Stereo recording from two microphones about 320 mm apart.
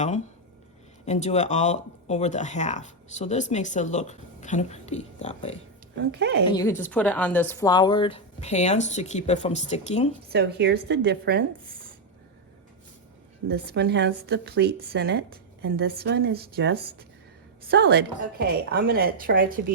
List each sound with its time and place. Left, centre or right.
1.0 s speech: left
6.0 s speech: right
6.5 s speech: centre
10.2 s speech: right
13.5 s a woman's voice: right